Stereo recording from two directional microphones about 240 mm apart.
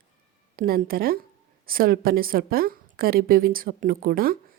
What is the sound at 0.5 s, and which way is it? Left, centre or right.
A woman's voice, right.